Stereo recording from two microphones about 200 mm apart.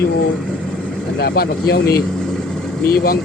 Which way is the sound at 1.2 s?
55° left (ahead or behind).